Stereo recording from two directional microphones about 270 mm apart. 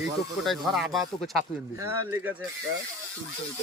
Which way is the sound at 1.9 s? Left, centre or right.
Centre.